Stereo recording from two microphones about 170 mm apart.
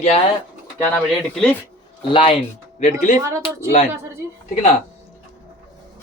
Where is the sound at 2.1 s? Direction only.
30° left (ahead or behind).